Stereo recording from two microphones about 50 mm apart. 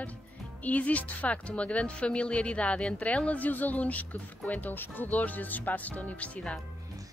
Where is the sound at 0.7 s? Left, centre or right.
Left.